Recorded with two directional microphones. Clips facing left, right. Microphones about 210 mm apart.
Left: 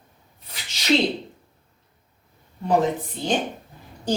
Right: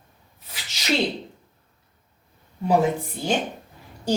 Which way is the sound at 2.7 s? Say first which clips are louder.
Even; 10° right (ahead or behind).